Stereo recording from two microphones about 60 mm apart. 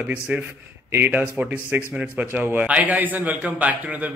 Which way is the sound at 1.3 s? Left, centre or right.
Centre.